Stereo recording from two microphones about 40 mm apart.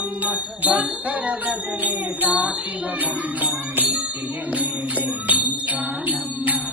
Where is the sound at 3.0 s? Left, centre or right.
Right.